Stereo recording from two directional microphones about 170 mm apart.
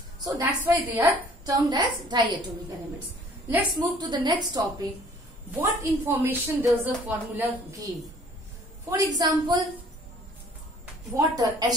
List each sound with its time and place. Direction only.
0.2 s a woman's voice: 15° right (ahead or behind)
3.5 s a woman's voice: 25° right (ahead or behind)
5.5 s a woman's voice: 10° right (ahead or behind)
8.9 s a woman's voice: 20° right (ahead or behind)
11.1 s a woman's voice: 20° right (ahead or behind)